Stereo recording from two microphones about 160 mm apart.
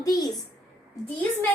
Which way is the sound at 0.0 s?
25° left (ahead or behind).